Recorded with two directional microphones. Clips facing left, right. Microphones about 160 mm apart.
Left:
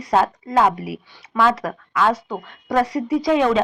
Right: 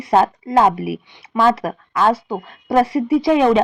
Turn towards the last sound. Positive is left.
turn(degrees=-25)  # may be behind; listen again after turning